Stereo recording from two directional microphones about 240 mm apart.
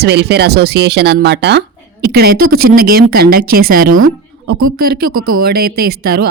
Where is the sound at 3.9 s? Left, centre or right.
Right.